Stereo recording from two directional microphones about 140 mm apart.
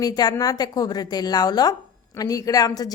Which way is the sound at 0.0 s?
25° left (ahead or behind).